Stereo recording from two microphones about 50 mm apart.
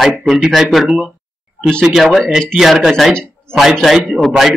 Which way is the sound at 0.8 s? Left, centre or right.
Right.